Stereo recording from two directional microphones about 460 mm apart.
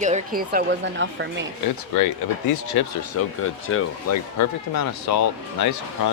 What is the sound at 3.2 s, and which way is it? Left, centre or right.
Speech, left.